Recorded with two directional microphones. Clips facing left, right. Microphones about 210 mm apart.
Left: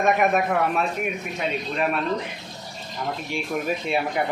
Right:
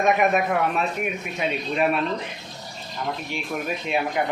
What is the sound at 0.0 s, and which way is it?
Speech, centre (ahead or behind).